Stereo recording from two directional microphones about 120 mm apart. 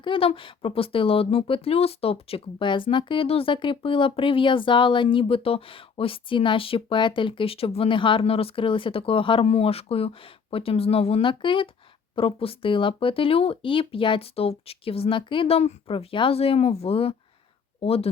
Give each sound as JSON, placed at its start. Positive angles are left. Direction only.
{"t": 0.0, "sound": "speech", "side_deg": 50}
{"t": 9.5, "sound": "speech", "side_deg": 60}